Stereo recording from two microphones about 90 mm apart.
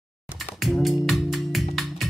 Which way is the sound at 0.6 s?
Centre (ahead or behind).